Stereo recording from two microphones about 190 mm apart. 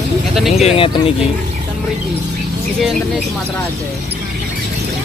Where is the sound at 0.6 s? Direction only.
30° left (ahead or behind).